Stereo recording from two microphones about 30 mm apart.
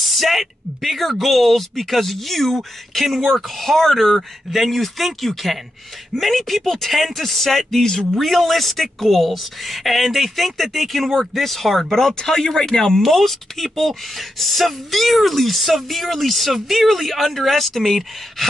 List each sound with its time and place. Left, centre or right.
0.0 s speech: centre
12.4 s speech: centre